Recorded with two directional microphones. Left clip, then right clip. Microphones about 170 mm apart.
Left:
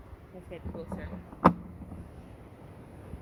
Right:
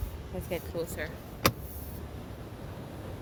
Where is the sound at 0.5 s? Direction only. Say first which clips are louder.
Right 6 dB; 40° right (ahead or behind).